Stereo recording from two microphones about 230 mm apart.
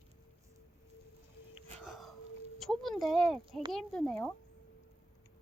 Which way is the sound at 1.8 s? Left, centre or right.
Centre.